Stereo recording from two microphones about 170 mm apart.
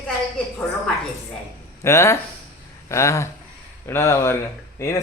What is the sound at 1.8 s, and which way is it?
A man's voice, 15° left (ahead or behind).